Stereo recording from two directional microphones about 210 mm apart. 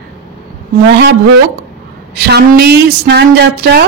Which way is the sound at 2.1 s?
50° right (ahead or behind).